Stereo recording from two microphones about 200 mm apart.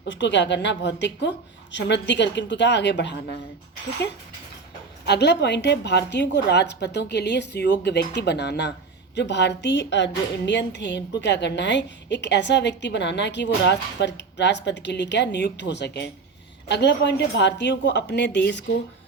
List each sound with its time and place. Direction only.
0.1 s a woman's voice: 65° left (ahead or behind)
5.0 s a woman's voice: 55° left (ahead or behind)